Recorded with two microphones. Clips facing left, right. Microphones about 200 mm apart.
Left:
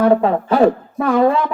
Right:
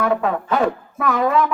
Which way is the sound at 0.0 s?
30° left (ahead or behind).